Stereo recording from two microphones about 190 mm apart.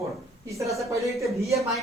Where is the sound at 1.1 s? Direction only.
Centre (ahead or behind).